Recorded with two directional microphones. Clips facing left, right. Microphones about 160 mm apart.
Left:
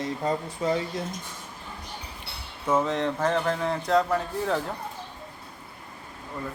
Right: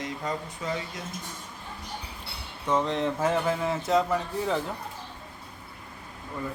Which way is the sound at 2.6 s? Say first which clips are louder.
Left 1 dB; 5° left (ahead or behind).